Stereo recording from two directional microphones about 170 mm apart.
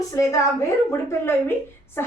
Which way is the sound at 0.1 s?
20° left (ahead or behind).